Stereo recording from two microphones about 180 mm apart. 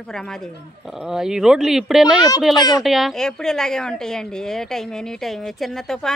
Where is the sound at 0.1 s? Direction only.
5° left (ahead or behind).